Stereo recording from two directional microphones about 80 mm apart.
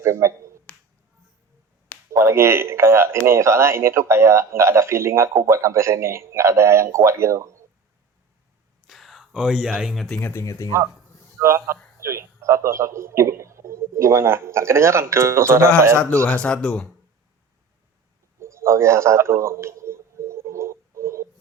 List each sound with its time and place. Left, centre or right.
0.0 s speech: right
0.7 s finger snapping: centre
2.1 s speech: right
8.9 s whispering: centre
9.4 s speech: centre
9.9 s speech: centre
10.2 s speech: left
10.4 s speech: left
11.3 s a man's voice: right
16.2 s speech: centre
18.3 s a sound: right